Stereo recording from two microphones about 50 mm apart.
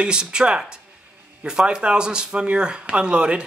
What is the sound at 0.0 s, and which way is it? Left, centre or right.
Speech, centre.